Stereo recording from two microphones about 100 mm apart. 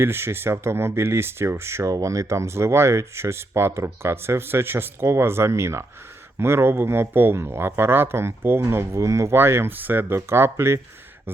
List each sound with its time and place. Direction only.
0.0 s speech: 25° right (ahead or behind)